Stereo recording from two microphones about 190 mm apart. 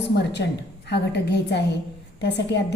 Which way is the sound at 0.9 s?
60° left (ahead or behind).